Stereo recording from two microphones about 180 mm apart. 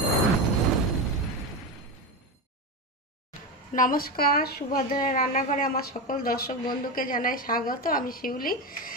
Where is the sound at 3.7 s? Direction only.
50° left (ahead or behind).